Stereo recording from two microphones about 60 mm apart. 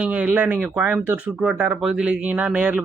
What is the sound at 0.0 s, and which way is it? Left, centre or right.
Speech, right.